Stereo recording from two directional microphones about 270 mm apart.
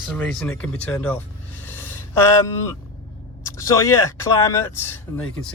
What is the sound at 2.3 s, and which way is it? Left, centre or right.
Speech, centre.